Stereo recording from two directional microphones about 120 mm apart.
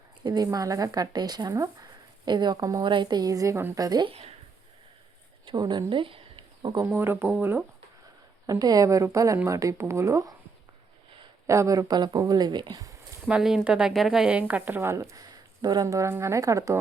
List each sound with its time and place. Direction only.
0.2 s speech: 35° right (ahead or behind)
4.1 s a woman's voice: 60° right (ahead or behind)
5.5 s speech: 40° right (ahead or behind)
6.9 s a woman's voice: 20° right (ahead or behind)
8.4 s a woman's voice: 30° right (ahead or behind)
11.4 s speech: 25° right (ahead or behind)
13.2 s a woman's voice: 5° right (ahead or behind); by 16.7 s 25° right (ahead or behind)